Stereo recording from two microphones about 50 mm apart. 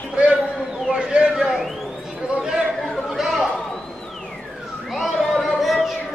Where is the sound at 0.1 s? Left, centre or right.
Right.